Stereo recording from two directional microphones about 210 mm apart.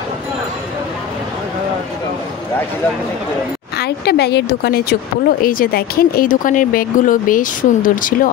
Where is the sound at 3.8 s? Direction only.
50° left (ahead or behind).